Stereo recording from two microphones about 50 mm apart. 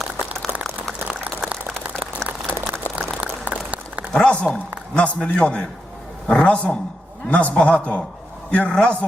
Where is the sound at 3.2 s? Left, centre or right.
Right.